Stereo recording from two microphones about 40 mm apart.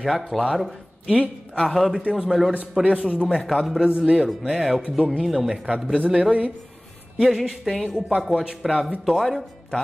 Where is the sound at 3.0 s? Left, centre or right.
Right.